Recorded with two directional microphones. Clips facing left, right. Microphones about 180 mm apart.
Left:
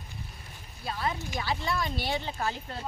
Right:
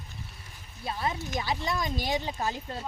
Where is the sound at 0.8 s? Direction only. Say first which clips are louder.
Right 1 dB; 25° right (ahead or behind).